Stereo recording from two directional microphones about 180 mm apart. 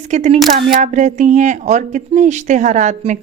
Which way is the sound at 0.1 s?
40° right (ahead or behind).